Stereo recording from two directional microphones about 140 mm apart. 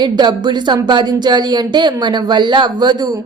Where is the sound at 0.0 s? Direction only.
30° right (ahead or behind).